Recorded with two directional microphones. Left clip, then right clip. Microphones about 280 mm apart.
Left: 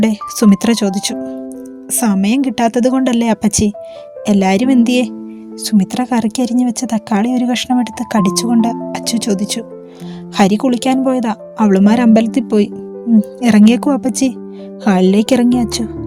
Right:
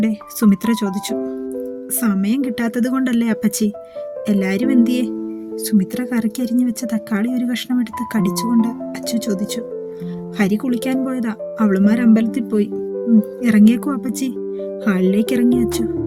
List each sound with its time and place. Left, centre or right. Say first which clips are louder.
0.0 s speech: left 5 dB; right